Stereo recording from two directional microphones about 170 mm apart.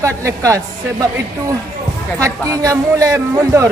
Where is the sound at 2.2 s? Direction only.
20° right (ahead or behind).